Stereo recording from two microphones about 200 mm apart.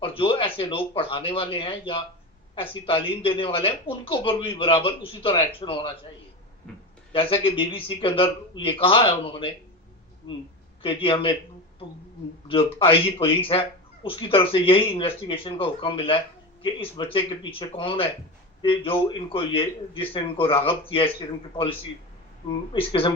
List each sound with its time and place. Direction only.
0.0 s speech: 25° left (ahead or behind)
6.7 s a sound: 5° left (ahead or behind)
7.1 s speech: 25° left (ahead or behind)
10.8 s speech: 25° left (ahead or behind)
12.5 s speech: 25° left (ahead or behind)